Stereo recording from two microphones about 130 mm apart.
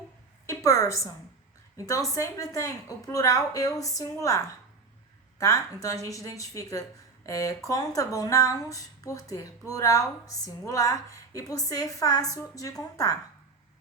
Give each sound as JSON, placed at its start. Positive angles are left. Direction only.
{"t": 0.4, "sound": "a woman's voice", "side_deg": 25}